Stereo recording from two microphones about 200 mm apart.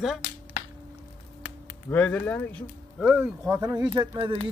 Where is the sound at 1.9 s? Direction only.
5° left (ahead or behind).